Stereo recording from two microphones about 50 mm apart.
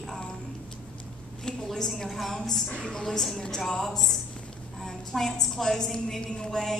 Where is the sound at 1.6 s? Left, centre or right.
Centre.